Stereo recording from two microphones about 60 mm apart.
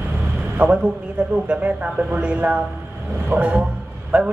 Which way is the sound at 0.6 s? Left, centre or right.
Right.